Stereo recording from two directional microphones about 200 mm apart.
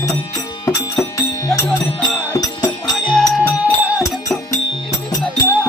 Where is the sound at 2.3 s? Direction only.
20° left (ahead or behind).